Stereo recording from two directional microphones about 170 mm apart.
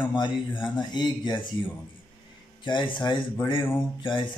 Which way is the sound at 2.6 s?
30° left (ahead or behind).